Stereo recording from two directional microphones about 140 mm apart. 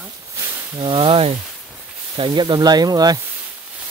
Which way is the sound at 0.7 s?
35° right (ahead or behind).